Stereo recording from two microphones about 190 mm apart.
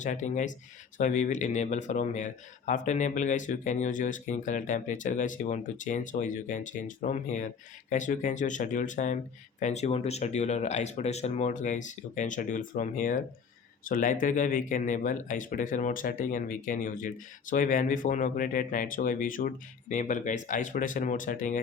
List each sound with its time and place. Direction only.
0.0 s speech: 40° left (ahead or behind)